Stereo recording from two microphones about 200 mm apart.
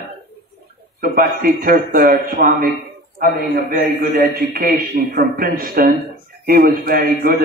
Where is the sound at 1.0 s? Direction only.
45° right (ahead or behind).